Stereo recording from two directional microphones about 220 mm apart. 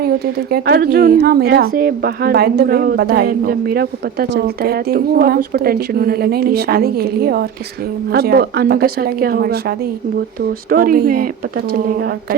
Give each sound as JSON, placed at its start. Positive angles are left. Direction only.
{"t": 0.5, "sound": "a woman's voice", "side_deg": -45}